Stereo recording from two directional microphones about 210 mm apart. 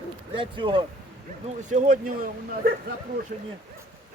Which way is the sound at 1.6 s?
35° right (ahead or behind).